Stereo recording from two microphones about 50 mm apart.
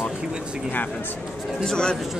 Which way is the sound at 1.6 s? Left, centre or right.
Centre.